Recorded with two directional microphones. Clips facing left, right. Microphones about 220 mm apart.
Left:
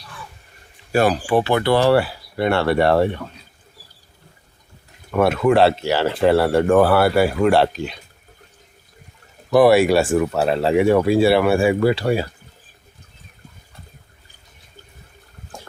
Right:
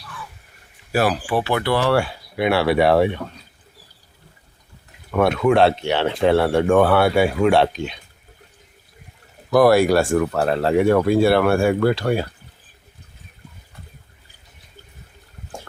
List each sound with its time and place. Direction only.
0.9 s speech: 5° right (ahead or behind)
1.5 s speech: 25° left (ahead or behind)
1.9 s speech: 5° left (ahead or behind)
5.1 s speech: centre (ahead or behind)
9.5 s speech: centre (ahead or behind)